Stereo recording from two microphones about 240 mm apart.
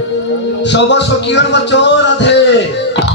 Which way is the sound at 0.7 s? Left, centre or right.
Left.